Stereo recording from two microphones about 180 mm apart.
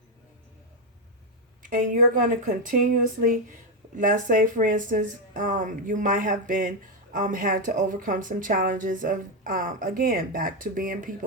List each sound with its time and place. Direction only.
1.6 s speech: 45° right (ahead or behind)
3.9 s speech: 45° right (ahead or behind)